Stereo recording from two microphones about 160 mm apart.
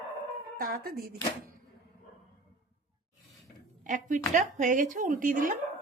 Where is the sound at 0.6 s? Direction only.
70° right (ahead or behind).